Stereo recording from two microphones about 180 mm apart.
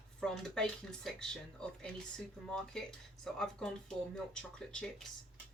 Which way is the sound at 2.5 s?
5° left (ahead or behind).